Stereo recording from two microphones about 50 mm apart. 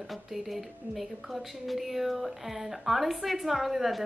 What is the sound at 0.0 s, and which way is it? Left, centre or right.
A woman's voice, centre.